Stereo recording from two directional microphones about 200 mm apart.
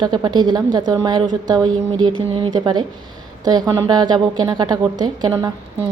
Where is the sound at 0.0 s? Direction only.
20° right (ahead or behind).